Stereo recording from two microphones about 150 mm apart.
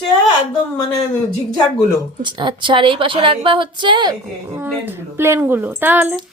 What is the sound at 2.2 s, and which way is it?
A woman's voice, 30° right (ahead or behind).